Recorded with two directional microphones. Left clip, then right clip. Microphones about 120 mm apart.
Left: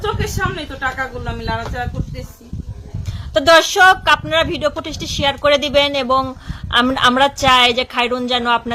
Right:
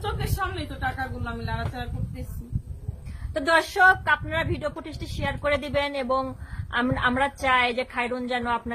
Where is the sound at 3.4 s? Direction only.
25° left (ahead or behind).